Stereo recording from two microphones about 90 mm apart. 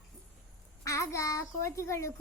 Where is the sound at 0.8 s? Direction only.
35° left (ahead or behind).